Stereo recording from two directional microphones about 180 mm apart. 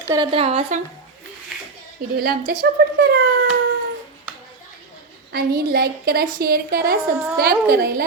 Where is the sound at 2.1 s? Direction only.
60° right (ahead or behind).